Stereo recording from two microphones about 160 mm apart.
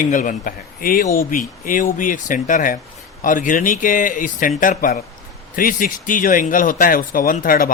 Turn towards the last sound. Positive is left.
turn(degrees=65)  # may be behind; listen again after turning